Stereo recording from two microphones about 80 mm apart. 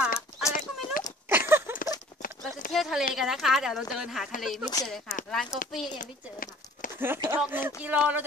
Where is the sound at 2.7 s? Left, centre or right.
Centre.